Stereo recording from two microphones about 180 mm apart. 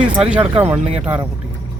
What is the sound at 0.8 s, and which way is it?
Speech, 35° right (ahead or behind).